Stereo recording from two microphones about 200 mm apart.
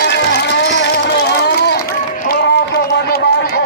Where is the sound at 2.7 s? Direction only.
50° left (ahead or behind).